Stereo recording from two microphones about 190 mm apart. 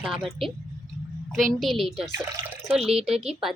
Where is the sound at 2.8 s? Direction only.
30° right (ahead or behind).